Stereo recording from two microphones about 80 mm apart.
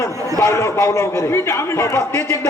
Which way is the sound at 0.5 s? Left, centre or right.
Left.